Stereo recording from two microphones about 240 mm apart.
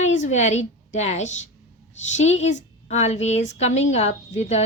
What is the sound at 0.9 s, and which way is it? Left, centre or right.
A woman's voice, left.